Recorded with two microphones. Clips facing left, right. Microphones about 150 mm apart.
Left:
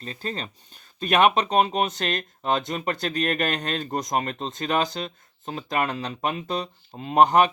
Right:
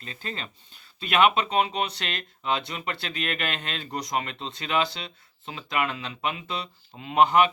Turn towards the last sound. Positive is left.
turn(degrees=40)  # may be behind; listen again after turning